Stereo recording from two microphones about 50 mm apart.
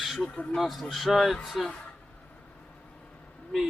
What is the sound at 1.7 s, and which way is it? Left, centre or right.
Speech, left.